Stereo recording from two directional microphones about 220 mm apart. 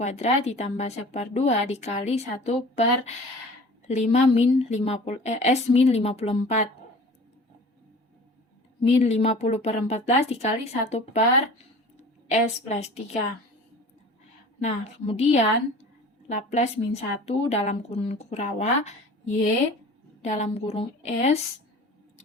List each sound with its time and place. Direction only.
0.0 s speech: 30° left (ahead or behind)
8.8 s speech: 30° left (ahead or behind)
12.6 s speech: 30° left (ahead or behind)
14.6 s speech: 30° left (ahead or behind)